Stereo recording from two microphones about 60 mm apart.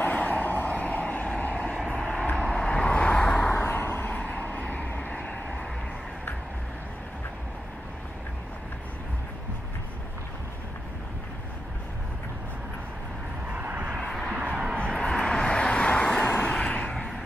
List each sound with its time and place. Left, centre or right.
0.0 s vehicle: left
3.6 s vehicle: left
4.1 s vehicle: left
13.5 s vehicle: right
14.4 s a sound: right
15.0 s vehicle: centre
16.4 s a sound: centre